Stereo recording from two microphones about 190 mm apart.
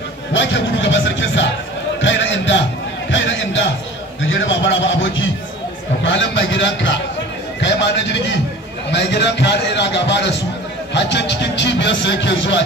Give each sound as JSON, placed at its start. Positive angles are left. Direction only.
{"t": 0.3, "sound": "music", "side_deg": 75}
{"t": 2.0, "sound": "a sound", "side_deg": 75}
{"t": 4.3, "sound": "a man's voice", "side_deg": 80}
{"t": 6.0, "sound": "a man's voice", "side_deg": 70}